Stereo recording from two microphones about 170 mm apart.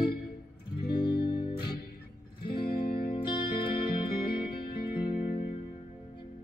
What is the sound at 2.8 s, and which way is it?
Music, 60° left (ahead or behind).